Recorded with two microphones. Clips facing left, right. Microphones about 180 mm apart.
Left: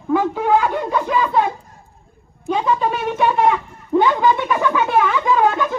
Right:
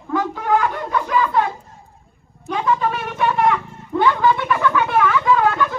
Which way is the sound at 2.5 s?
20° left (ahead or behind).